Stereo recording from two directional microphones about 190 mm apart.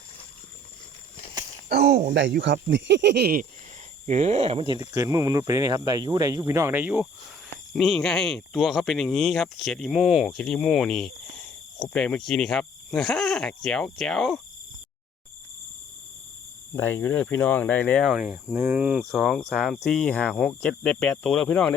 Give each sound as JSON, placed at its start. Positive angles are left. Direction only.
{"t": 1.9, "sound": "speech", "side_deg": -40}
{"t": 2.1, "sound": "speech", "side_deg": -70}
{"t": 4.0, "sound": "speech", "side_deg": -35}
{"t": 7.7, "sound": "speech", "side_deg": 0}
{"t": 16.7, "sound": "speech", "side_deg": 10}